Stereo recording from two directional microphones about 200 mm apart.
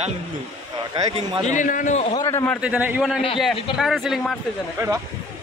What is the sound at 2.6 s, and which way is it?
A man's voice, 5° right (ahead or behind).